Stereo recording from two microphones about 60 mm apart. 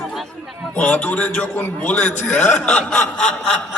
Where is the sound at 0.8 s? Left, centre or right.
Left.